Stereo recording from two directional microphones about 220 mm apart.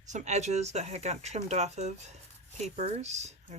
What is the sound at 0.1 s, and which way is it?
Speech, 30° right (ahead or behind).